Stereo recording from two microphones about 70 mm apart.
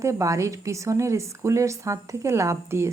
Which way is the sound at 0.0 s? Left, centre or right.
Right.